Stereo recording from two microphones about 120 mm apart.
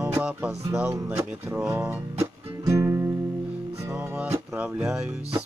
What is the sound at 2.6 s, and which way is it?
Music, 25° right (ahead or behind).